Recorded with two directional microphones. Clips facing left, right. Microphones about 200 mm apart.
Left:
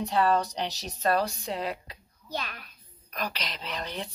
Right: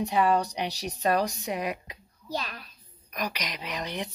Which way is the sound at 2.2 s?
40° right (ahead or behind).